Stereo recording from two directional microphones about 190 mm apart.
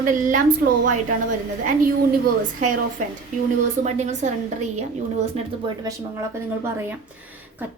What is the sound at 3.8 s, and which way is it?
Speech, 40° right (ahead or behind).